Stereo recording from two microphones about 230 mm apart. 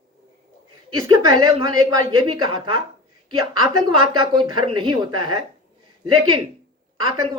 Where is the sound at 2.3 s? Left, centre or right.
Right.